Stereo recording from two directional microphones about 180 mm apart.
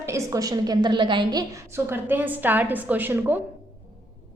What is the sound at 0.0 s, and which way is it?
A woman's voice, 15° right (ahead or behind).